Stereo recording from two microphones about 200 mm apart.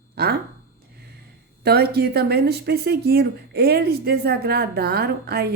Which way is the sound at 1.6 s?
50° right (ahead or behind).